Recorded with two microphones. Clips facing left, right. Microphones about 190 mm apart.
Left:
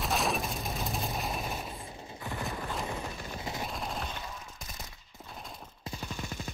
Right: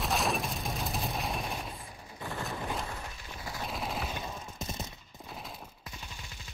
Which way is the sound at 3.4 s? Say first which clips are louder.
Left 1 dB; 20° left (ahead or behind).